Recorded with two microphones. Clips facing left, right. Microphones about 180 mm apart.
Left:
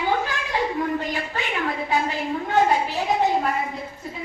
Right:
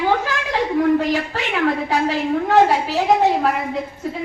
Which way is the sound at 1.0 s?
80° right.